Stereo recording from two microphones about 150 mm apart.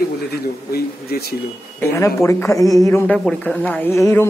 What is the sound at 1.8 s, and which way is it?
A woman's voice, 20° left (ahead or behind).